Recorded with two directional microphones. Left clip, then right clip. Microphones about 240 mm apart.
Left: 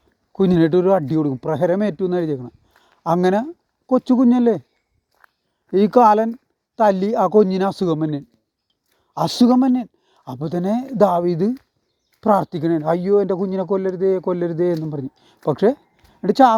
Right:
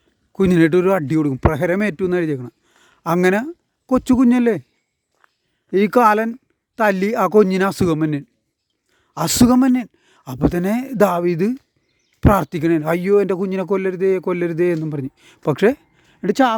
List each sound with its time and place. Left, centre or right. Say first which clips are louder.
0.3 s a man's voice: right 1 dB; right
5.1 s a sound: left 3 dB; left
5.7 s a man's voice: left 1 dB; right